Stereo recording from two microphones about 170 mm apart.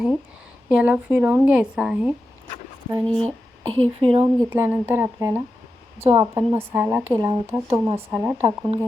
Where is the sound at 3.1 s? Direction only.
5° left (ahead or behind).